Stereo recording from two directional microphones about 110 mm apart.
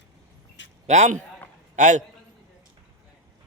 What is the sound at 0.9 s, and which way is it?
A man's voice, 90° right.